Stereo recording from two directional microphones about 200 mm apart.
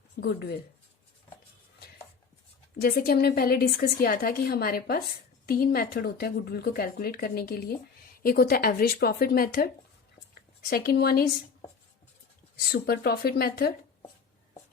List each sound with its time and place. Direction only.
0.2 s speech: 55° left (ahead or behind)
2.8 s a woman's voice: 50° left (ahead or behind)
10.7 s a woman's voice: 50° left (ahead or behind)
12.7 s a woman's voice: 50° left (ahead or behind)